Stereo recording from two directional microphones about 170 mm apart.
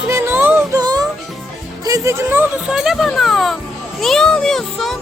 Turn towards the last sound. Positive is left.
turn(degrees=0)  # may be behind; listen again after turning